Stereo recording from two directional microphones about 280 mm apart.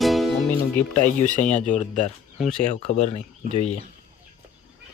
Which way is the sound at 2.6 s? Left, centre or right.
Left.